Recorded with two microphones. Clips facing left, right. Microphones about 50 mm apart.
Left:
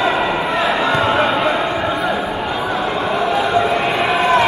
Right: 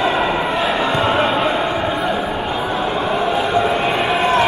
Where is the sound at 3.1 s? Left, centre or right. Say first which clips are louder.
Left 2 dB; left.